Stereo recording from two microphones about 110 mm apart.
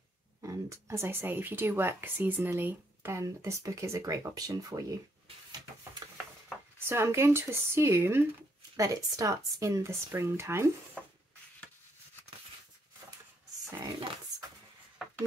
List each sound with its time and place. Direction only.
0.4 s speech: 25° right (ahead or behind)
6.0 s a sound: 35° right (ahead or behind)
6.9 s speech: 25° right (ahead or behind)
8.7 s speech: 35° right (ahead or behind)